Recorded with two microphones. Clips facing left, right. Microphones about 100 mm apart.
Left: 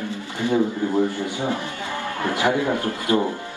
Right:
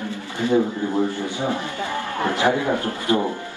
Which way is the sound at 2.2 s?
20° right (ahead or behind).